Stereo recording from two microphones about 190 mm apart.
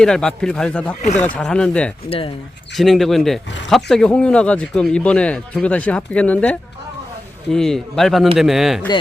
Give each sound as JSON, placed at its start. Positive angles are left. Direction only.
{"t": 0.0, "sound": "speech", "side_deg": 5}
{"t": 2.0, "sound": "speech", "side_deg": 30}
{"t": 2.7, "sound": "speech", "side_deg": 0}